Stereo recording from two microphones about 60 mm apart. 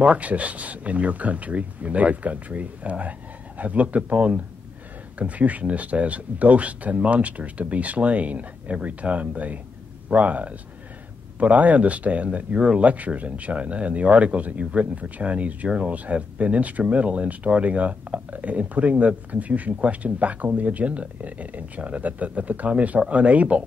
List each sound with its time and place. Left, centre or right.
0.0 s speech: right